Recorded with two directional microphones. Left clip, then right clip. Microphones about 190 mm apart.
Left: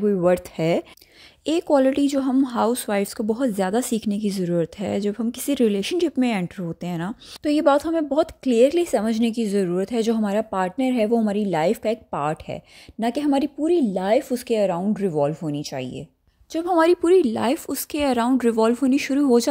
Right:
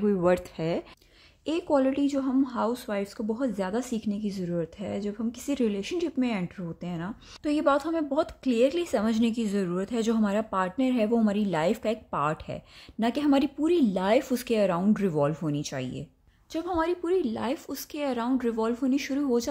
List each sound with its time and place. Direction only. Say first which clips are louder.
0.0 s speech: left 5 dB; 20° left (ahead or behind)
16.5 s a woman's voice: left 10 dB; 40° left (ahead or behind)